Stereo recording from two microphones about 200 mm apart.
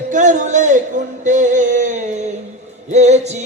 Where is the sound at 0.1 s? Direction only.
40° right (ahead or behind).